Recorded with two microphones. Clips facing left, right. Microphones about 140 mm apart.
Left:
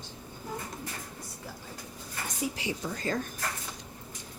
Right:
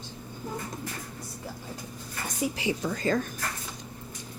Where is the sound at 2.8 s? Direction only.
90° right.